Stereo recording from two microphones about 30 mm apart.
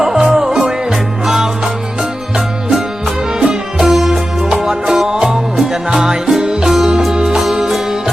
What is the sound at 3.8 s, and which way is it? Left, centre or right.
Music, centre.